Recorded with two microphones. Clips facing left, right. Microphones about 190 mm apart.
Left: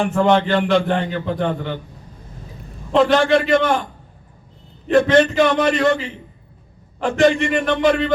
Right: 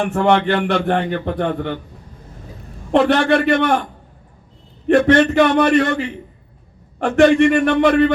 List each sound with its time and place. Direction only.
0.1 s a man's voice: 60° right (ahead or behind)
2.9 s a man's voice: 60° right (ahead or behind)
4.9 s a man's voice: 65° right (ahead or behind)
7.0 s a man's voice: 60° right (ahead or behind)